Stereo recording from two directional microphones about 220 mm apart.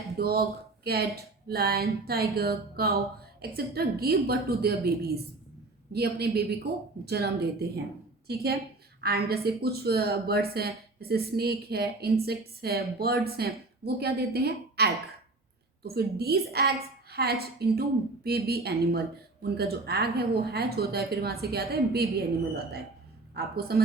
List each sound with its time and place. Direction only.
0.2 s speech: 45° right (ahead or behind)
23.3 s speech: 45° right (ahead or behind)